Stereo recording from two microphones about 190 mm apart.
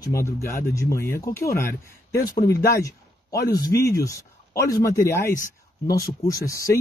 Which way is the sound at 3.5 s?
15° left (ahead or behind).